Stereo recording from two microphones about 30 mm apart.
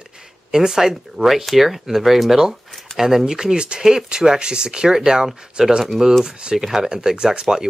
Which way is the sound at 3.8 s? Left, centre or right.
Centre.